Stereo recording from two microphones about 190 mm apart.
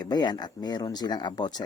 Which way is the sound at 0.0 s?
20° left (ahead or behind).